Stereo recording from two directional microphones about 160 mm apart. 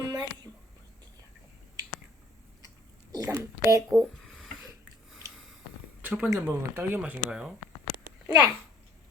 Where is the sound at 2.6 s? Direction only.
20° right (ahead or behind).